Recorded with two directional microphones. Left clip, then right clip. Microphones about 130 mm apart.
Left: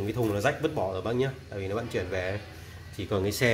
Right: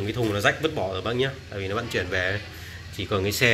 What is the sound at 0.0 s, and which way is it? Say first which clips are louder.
Speech: right 4 dB; 25° left (ahead or behind).